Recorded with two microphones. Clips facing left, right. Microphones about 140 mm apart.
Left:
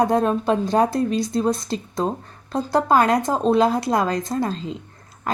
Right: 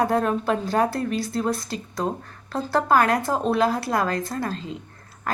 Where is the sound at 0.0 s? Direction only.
20° left (ahead or behind).